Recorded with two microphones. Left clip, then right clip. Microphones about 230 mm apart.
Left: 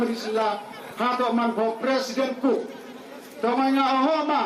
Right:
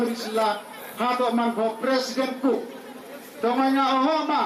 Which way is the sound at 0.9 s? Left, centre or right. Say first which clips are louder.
Even; left.